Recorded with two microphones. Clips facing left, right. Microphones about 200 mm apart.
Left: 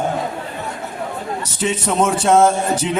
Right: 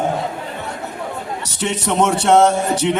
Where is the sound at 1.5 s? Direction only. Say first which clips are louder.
Even; 70° right (ahead or behind).